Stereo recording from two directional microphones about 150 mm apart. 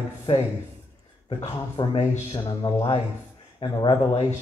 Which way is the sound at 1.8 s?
30° left (ahead or behind).